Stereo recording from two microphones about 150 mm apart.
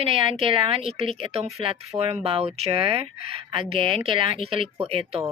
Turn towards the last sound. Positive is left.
turn(degrees=-40)  # may be behind; listen again after turning